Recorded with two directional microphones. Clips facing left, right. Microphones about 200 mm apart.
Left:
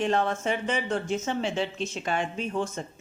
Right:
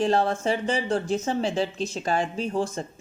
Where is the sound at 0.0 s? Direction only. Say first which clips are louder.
Right 3 dB; 35° right (ahead or behind).